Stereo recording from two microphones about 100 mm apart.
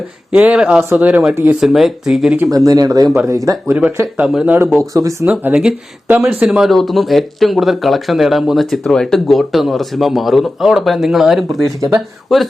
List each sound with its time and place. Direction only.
0.3 s speech: 10° right (ahead or behind)
2.6 s speech: 40° right (ahead or behind)
3.7 s speech: 15° right (ahead or behind)
4.8 s speech: 35° right (ahead or behind)
5.2 s speech: 15° right (ahead or behind)